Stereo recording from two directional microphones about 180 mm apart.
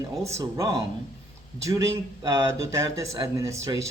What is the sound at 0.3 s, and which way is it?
Speech, 15° right (ahead or behind).